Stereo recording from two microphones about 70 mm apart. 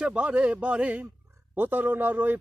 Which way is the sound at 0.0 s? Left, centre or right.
Centre.